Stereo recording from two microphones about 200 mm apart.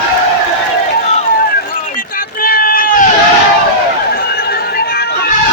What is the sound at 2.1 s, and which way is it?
Run, 45° left (ahead or behind).